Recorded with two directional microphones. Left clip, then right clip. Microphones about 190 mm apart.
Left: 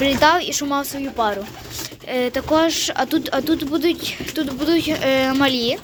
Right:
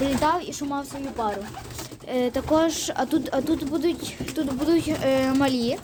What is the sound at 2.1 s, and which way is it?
Speech, 15° right (ahead or behind).